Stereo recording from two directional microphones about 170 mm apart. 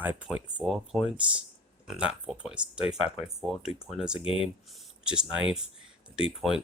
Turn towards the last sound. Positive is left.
turn(degrees=0)  # may be behind; listen again after turning